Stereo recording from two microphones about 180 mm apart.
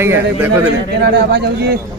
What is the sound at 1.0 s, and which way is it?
Speech, 65° right (ahead or behind).